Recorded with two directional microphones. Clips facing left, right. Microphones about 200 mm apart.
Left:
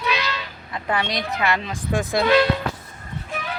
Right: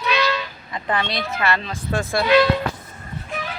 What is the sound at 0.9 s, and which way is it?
Speech, 15° left (ahead or behind).